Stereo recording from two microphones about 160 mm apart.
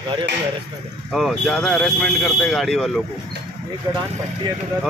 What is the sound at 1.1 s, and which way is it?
Speech, centre (ahead or behind).